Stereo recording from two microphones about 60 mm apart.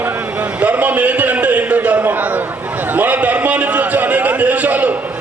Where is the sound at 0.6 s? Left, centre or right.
Right.